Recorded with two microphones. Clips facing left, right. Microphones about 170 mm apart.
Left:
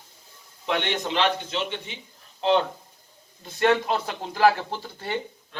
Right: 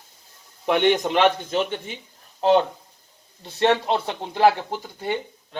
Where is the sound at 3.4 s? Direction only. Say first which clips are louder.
Right 1 dB; 30° right (ahead or behind).